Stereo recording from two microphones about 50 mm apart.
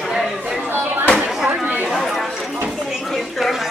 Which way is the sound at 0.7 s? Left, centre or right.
Right.